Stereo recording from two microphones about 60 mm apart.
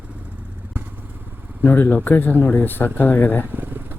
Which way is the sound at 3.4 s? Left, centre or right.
Right.